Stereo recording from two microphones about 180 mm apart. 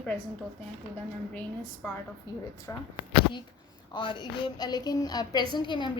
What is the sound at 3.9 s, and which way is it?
A woman's voice, 25° left (ahead or behind).